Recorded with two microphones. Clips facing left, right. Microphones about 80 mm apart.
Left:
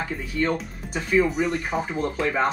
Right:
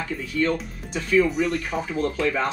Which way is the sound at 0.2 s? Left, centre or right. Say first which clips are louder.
Right 2 dB; centre.